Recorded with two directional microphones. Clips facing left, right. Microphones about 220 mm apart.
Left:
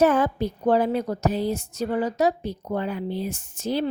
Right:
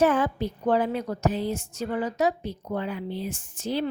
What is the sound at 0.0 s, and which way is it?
A woman's voice, 40° left (ahead or behind).